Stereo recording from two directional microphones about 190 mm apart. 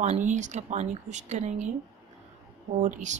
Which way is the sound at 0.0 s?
40° right (ahead or behind).